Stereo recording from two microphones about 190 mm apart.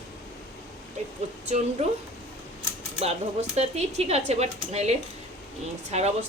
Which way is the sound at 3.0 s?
35° right (ahead or behind).